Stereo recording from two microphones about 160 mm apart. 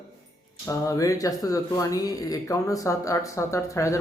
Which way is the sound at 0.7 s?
20° left (ahead or behind).